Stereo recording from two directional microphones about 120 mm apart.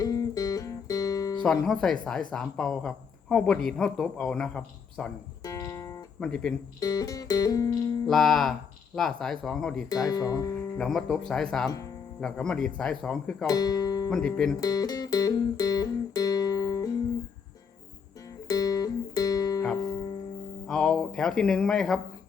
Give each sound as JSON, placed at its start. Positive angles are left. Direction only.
{"t": 0.0, "sound": "guitar", "side_deg": 30}
{"t": 1.5, "sound": "speech", "side_deg": 5}
{"t": 5.4, "sound": "music", "side_deg": 30}
{"t": 6.1, "sound": "speech", "side_deg": 10}
{"t": 6.7, "sound": "music", "side_deg": 30}
{"t": 8.0, "sound": "speech", "side_deg": 5}
{"t": 9.9, "sound": "music", "side_deg": 30}
{"t": 10.8, "sound": "speech", "side_deg": 5}
{"t": 13.5, "sound": "music", "side_deg": 30}
{"t": 14.1, "sound": "speech", "side_deg": 5}
{"t": 14.6, "sound": "music", "side_deg": 30}
{"t": 18.4, "sound": "music", "side_deg": 30}
{"t": 20.7, "sound": "speech", "side_deg": 5}